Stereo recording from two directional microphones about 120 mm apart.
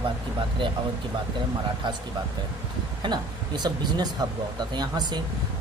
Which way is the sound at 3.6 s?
35° right (ahead or behind).